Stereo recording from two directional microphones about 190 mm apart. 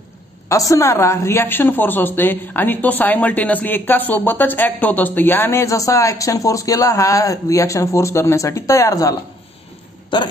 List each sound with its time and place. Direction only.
0.5 s a woman's voice: 15° left (ahead or behind)
10.1 s speech: 25° left (ahead or behind)